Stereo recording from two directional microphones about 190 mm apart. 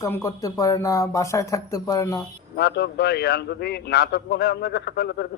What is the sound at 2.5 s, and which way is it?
A man's voice, 60° left (ahead or behind).